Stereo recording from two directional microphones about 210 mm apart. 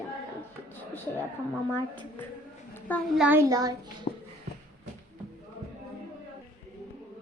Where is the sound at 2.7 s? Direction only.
5° left (ahead or behind).